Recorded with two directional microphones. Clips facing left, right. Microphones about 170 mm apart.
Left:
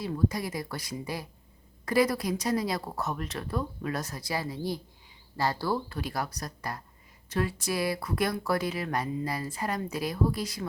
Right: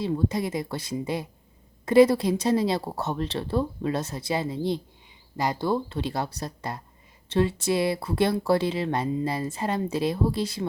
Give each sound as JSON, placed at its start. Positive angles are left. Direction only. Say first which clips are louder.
{"t": 0.0, "sound": "speech", "louder": "right 4 dB", "side_deg": -25}